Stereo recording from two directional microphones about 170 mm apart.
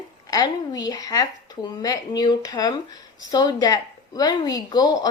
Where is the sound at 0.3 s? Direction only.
20° left (ahead or behind).